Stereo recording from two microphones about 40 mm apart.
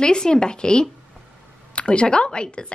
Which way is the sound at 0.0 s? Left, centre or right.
Left.